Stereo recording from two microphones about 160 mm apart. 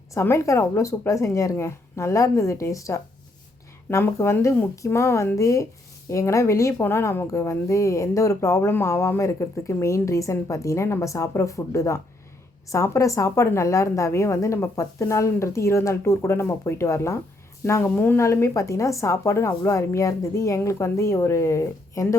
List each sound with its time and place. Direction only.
0.1 s a woman's voice: 15° left (ahead or behind)